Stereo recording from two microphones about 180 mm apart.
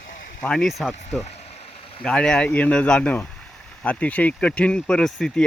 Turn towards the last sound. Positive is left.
turn(degrees=0)  # may be behind; listen again after turning